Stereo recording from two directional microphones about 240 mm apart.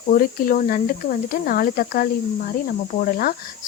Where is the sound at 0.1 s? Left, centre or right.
Left.